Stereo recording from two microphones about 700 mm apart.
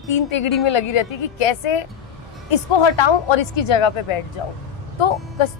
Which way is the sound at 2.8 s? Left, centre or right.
Left.